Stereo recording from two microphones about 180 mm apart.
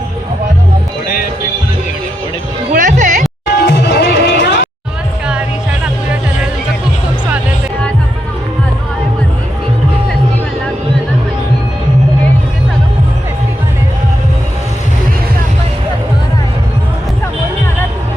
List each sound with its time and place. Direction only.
1.0 s music: 55° left (ahead or behind)
2.7 s music: 45° right (ahead or behind)
3.6 s music: 65° left (ahead or behind)